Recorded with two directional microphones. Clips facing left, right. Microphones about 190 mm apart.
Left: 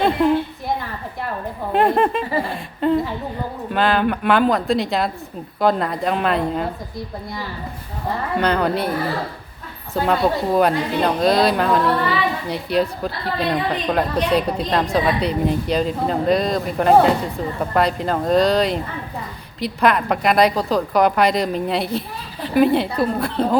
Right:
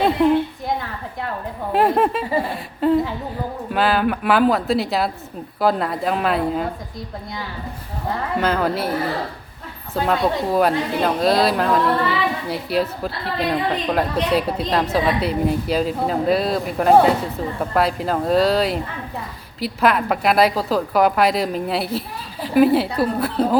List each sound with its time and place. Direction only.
1.7 s a woman's voice: centre (ahead or behind)
8.4 s a woman's voice: centre (ahead or behind)
9.9 s a woman's voice: centre (ahead or behind)